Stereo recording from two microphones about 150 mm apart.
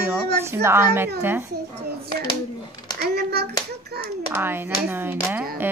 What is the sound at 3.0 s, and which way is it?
Clapping, 90° right.